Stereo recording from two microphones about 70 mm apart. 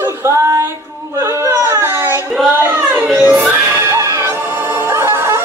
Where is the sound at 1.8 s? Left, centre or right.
Right.